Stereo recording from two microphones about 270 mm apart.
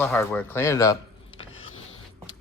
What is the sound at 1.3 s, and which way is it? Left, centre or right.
Power windows, left.